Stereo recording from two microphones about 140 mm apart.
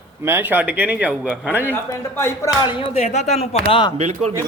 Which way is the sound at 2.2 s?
15° left (ahead or behind).